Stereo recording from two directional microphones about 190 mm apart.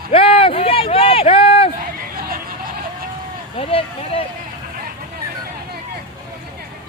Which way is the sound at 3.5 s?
30° left (ahead or behind).